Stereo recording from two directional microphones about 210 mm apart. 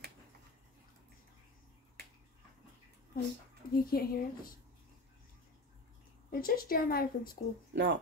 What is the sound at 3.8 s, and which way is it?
Speech, 45° left (ahead or behind).